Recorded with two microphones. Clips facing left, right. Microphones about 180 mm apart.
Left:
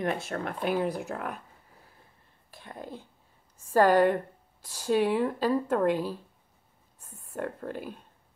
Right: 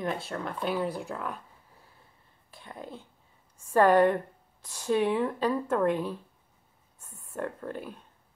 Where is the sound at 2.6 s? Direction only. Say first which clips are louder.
Left 1 dB; 45° left (ahead or behind).